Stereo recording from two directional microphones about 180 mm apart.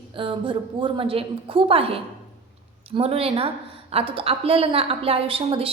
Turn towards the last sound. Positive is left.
turn(degrees=-30)  # may be behind; listen again after turning